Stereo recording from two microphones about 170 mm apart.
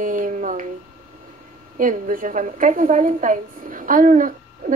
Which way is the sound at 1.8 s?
50° right (ahead or behind).